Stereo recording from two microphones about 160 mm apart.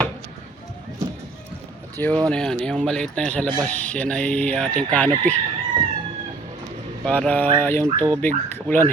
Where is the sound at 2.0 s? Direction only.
10° left (ahead or behind).